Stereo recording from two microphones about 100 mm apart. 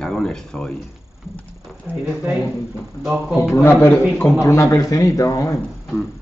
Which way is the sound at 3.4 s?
25° left (ahead or behind).